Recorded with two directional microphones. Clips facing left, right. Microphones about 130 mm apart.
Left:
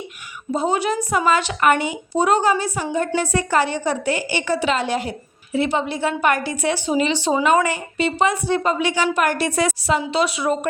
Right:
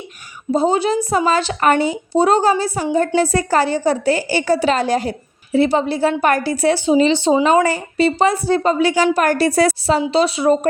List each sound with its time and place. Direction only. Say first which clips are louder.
0.5 s a woman's voice: right 5 dB; 30° right (ahead or behind)